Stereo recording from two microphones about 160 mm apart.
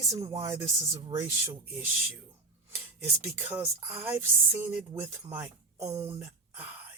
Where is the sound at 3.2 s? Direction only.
15° right (ahead or behind).